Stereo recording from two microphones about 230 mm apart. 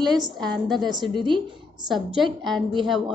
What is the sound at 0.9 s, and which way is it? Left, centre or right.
Speech, centre.